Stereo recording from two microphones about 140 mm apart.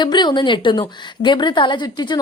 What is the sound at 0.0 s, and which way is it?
A woman's voice, 30° left (ahead or behind).